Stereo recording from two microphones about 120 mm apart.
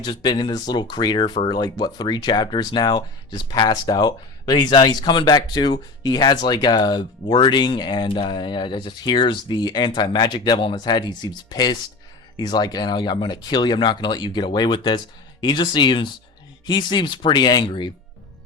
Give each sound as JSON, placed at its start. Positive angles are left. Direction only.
{"t": 0.0, "sound": "speech", "side_deg": 35}